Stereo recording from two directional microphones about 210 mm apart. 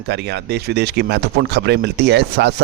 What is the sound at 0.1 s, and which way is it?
Speech, 55° right (ahead or behind).